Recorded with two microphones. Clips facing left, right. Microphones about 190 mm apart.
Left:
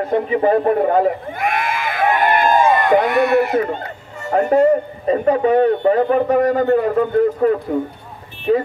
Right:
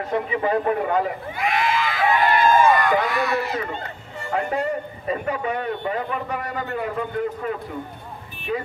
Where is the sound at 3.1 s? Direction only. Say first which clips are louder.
Left 9 dB; 60° left (ahead or behind).